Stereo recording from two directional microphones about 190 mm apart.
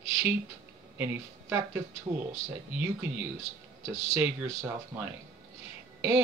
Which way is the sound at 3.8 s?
15° right (ahead or behind).